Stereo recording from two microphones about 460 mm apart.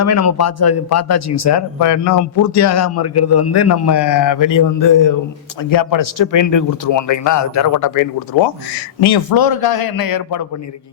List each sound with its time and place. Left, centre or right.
0.0 s a man's voice: left
9.0 s a man's voice: left